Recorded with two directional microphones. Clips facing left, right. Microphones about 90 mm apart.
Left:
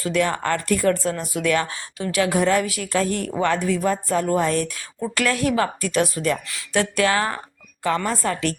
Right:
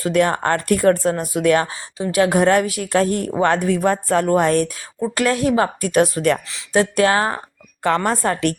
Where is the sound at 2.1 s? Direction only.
40° right (ahead or behind).